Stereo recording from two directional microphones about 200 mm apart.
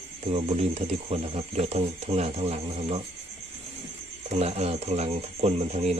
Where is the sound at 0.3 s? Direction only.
30° right (ahead or behind).